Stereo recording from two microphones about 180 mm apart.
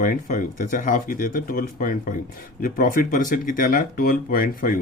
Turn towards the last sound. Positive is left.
turn(degrees=50)  # may be behind; listen again after turning